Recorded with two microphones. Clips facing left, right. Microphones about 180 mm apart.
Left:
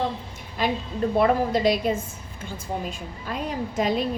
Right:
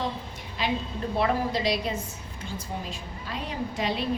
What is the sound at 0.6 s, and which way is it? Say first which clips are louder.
A woman's voice: left 4 dB; 50° left (ahead or behind).